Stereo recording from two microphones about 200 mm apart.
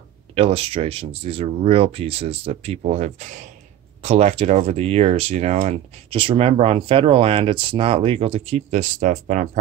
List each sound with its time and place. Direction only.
0.3 s speech: 30° right (ahead or behind)